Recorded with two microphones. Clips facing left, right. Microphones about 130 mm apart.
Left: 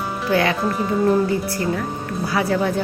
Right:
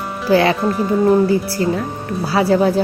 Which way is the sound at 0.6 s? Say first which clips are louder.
Right 4 dB; 5° right (ahead or behind).